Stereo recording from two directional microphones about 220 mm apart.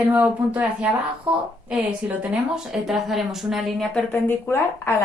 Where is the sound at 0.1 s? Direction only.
5° right (ahead or behind).